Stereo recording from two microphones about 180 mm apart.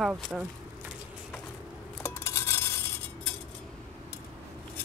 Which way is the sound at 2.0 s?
15° left (ahead or behind).